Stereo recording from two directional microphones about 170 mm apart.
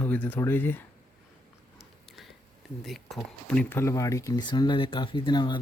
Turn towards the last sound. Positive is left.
turn(degrees=25)  # may be behind; listen again after turning